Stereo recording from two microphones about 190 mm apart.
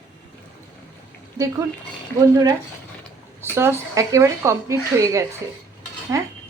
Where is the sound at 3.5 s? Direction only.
15° right (ahead or behind).